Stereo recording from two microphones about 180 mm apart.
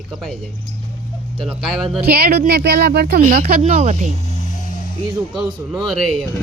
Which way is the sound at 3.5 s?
45° right (ahead or behind).